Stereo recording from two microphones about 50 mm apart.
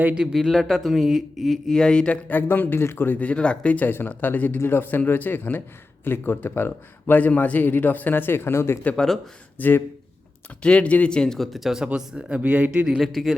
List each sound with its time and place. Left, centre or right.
0.4 s speech: centre
1.7 s speech: centre
2.2 s a man's voice: left
3.2 s speech: left
3.8 s a man's voice: left
9.6 s a man's voice: left
10.6 s speech: left
11.5 s speech: centre
11.9 s speech: right
13.0 s speech: centre